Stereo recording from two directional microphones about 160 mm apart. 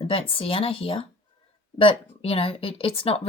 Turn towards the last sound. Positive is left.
turn(degrees=35)  # may be behind; listen again after turning